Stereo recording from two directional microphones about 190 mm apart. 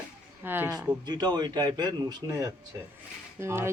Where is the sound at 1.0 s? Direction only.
20° right (ahead or behind).